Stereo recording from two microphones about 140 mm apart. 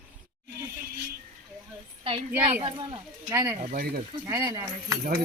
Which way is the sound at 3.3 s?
20° right (ahead or behind).